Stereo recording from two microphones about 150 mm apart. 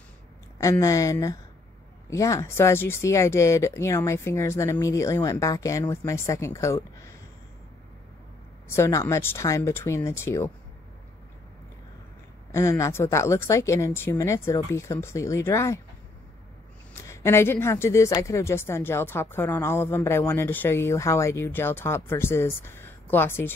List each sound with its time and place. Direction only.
0.6 s speech: 20° left (ahead or behind)
8.6 s a woman's voice: 15° left (ahead or behind)
12.5 s speech: 20° left (ahead or behind)
16.9 s a woman's voice: 20° left (ahead or behind)